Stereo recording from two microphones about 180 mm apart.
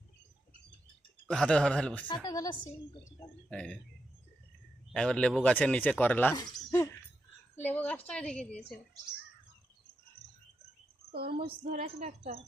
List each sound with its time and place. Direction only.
1.3 s speech: 5° left (ahead or behind)
2.2 s a woman's voice: 20° left (ahead or behind)
3.5 s speech: 5° left (ahead or behind)
4.9 s speech: 5° left (ahead or behind)
6.3 s speech: 20° left (ahead or behind)
11.1 s a woman's voice: 60° right (ahead or behind); by 12.4 s 40° right (ahead or behind)